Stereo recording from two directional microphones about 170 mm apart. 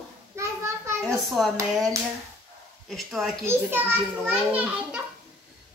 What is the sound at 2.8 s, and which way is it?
Speech, centre (ahead or behind).